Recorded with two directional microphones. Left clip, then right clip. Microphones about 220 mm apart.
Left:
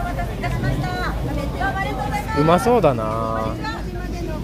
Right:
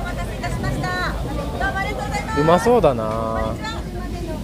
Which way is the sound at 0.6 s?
30° right (ahead or behind).